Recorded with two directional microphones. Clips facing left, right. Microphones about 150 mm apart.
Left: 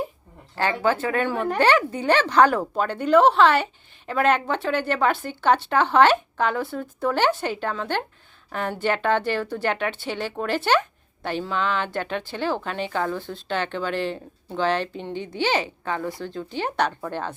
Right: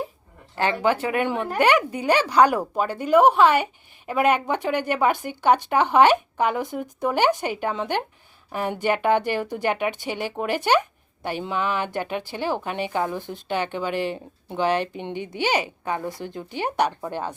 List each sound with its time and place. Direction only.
0.5 s speech: 20° right (ahead or behind)